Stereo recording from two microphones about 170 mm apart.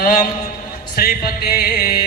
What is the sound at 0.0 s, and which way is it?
Speech, 60° left (ahead or behind).